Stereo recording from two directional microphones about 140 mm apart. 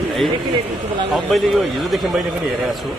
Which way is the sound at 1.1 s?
Centre (ahead or behind).